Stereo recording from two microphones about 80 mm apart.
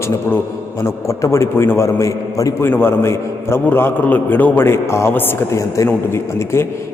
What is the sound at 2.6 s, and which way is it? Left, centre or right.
A man's voice, left.